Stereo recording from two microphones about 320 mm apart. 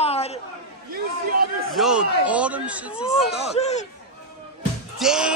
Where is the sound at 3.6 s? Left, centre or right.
Left.